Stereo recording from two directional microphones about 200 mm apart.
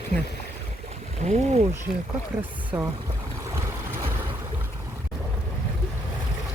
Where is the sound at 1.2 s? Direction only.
35° right (ahead or behind).